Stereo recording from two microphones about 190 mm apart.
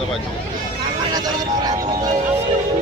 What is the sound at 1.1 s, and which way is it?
Speech, 20° right (ahead or behind).